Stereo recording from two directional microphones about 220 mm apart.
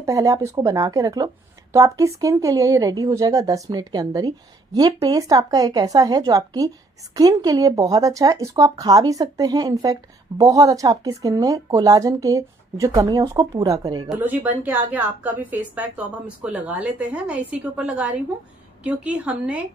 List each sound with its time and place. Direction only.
0.0 s speech: 15° right (ahead or behind)
14.0 s speech: 10° right (ahead or behind)